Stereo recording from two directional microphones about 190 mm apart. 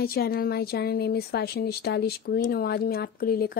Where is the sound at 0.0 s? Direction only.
55° left (ahead or behind).